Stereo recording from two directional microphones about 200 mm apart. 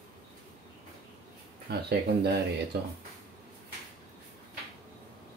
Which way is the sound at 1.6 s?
55° right (ahead or behind).